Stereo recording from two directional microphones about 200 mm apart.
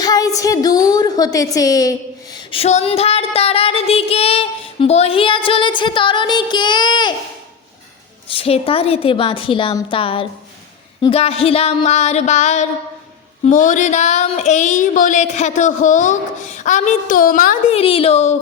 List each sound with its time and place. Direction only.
0.0 s a woman's voice: 20° left (ahead or behind)
8.3 s a woman's voice: 30° left (ahead or behind)
11.0 s a sound: 30° left (ahead or behind)